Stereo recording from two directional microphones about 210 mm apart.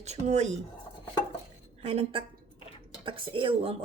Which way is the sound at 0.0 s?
30° right (ahead or behind).